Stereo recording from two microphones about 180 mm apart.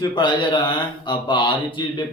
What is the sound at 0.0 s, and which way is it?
Mantra, 25° left (ahead or behind).